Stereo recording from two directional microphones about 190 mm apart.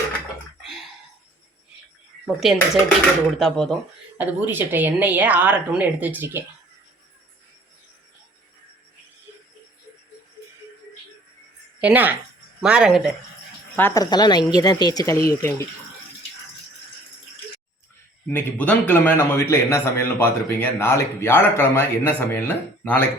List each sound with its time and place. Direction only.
0.6 s a sound: centre (ahead or behind)
2.2 s speech: centre (ahead or behind)
4.2 s a woman's voice: 10° right (ahead or behind)
11.8 s a woman's voice: 10° right (ahead or behind)
13.7 s a woman's voice: 15° left (ahead or behind)
18.3 s a man's voice: 10° left (ahead or behind)